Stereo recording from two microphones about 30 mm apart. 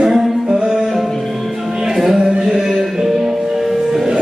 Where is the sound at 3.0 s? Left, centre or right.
Centre.